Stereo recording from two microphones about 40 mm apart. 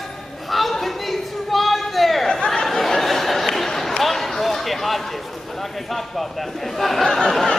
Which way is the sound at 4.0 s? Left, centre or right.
Centre.